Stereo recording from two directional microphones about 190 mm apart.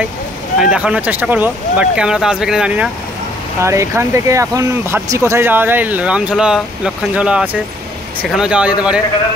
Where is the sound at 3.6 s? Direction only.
15° right (ahead or behind).